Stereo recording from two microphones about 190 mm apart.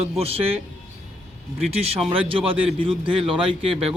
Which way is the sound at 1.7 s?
30° right (ahead or behind).